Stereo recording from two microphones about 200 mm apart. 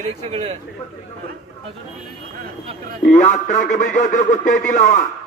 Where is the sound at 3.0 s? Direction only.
35° left (ahead or behind).